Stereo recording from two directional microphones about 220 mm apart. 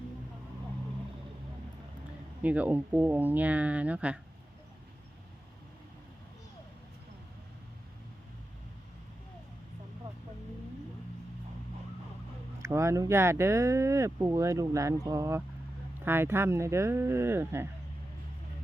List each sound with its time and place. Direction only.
2.4 s speech: 5° right (ahead or behind)
12.6 s speech: 15° right (ahead or behind)